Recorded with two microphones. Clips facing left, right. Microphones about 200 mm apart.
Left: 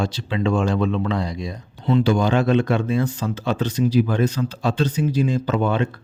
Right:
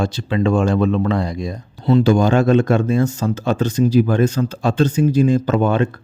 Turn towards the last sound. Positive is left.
turn(degrees=-45)  # may be behind; listen again after turning